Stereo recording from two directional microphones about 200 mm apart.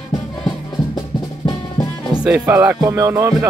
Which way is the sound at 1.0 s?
20° left (ahead or behind).